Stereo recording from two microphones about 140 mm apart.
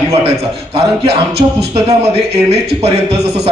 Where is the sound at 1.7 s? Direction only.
45° right (ahead or behind).